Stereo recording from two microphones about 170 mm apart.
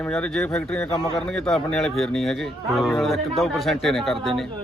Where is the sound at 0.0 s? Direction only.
5° left (ahead or behind).